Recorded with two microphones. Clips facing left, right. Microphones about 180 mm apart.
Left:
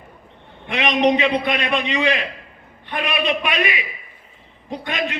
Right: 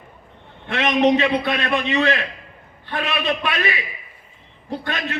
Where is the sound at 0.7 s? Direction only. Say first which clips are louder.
Right 1 dB; 15° left (ahead or behind).